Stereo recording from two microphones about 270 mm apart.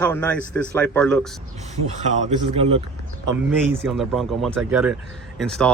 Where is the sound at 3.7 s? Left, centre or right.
Centre.